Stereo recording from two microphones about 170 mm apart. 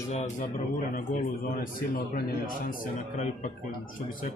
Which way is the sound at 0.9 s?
55° left (ahead or behind).